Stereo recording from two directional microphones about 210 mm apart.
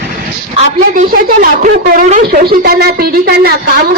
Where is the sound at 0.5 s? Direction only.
40° right (ahead or behind).